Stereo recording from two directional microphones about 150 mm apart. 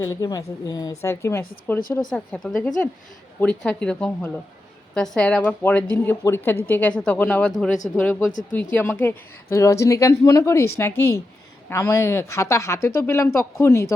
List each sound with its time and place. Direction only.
0.0 s a woman's voice: 25° left (ahead or behind)